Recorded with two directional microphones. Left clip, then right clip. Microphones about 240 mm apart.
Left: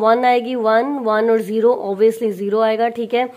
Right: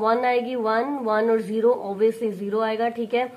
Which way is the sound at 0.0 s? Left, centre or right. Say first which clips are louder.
Left 7 dB; left.